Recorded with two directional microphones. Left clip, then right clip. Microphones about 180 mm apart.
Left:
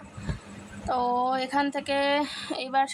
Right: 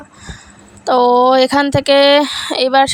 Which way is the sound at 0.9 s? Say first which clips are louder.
Right 15 dB; 55° right (ahead or behind).